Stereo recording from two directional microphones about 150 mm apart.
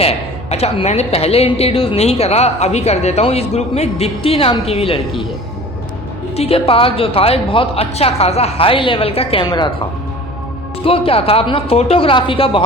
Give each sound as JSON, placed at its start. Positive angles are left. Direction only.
{"t": 0.0, "sound": "a woman's voice", "side_deg": 40}
{"t": 6.3, "sound": "a woman's voice", "side_deg": 40}
{"t": 10.8, "sound": "a woman's voice", "side_deg": 40}